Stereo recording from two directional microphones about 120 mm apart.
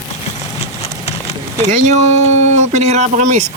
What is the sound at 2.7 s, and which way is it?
Speech, 70° right (ahead or behind).